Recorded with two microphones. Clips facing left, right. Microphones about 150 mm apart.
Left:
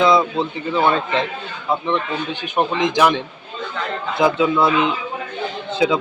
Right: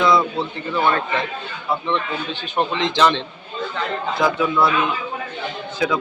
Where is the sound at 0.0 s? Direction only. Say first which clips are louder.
Left 2 dB; 20° left (ahead or behind).